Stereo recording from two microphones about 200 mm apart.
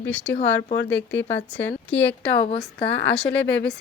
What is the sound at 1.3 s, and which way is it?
A woman's voice, 10° left (ahead or behind).